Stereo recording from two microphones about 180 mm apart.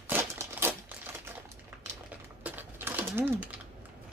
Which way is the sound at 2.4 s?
10° right (ahead or behind).